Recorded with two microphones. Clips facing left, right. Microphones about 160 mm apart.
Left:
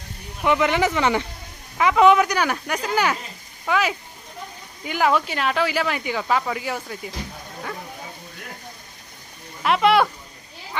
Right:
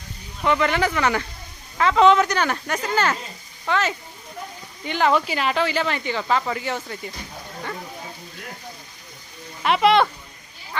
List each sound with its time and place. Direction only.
0.4 s speech: 15° left (ahead or behind)
9.6 s speech: centre (ahead or behind)